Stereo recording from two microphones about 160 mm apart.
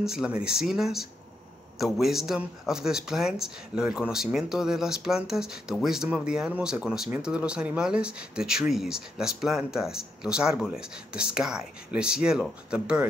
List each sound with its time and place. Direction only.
0.0 s speech: 5° right (ahead or behind)